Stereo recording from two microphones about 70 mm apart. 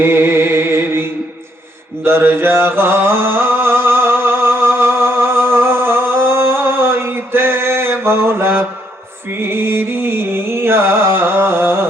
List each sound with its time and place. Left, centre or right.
0.0 s music: right
2.0 s mantra: right
9.4 s music: right